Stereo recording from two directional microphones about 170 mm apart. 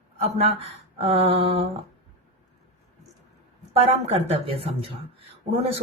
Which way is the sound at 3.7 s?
35° right (ahead or behind).